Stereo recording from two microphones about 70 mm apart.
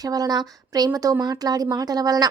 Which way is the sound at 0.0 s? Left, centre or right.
Right.